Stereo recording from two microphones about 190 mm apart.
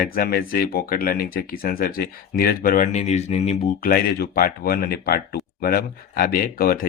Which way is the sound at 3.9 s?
50° left (ahead or behind).